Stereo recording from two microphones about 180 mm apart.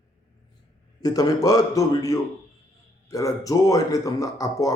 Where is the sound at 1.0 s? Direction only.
20° left (ahead or behind).